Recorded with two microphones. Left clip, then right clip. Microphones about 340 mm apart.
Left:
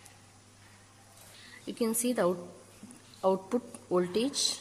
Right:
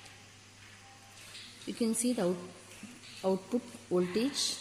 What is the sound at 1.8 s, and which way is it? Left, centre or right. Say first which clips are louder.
A woman's voice: left 3 dB; left.